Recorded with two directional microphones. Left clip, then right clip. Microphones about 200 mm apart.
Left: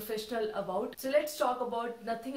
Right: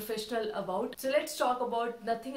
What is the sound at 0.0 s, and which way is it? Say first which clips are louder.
A woman's voice: right 1 dB; 15° right (ahead or behind).